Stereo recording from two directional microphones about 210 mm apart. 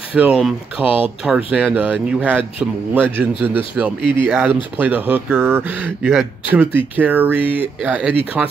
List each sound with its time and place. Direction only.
0.1 s speech: 5° right (ahead or behind)
7.3 s speech: 25° left (ahead or behind)
7.8 s speech: 5° right (ahead or behind)